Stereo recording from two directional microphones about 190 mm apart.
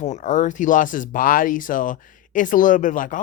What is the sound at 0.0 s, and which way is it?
Speech, 40° left (ahead or behind).